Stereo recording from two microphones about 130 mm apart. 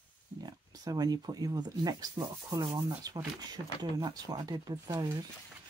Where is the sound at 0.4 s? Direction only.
30° right (ahead or behind).